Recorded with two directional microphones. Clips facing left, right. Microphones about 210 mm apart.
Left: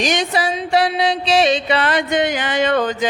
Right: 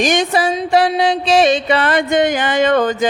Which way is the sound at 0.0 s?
50° right (ahead or behind).